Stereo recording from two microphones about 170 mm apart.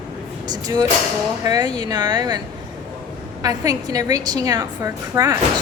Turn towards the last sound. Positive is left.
turn(degrees=-20)  # may be behind; listen again after turning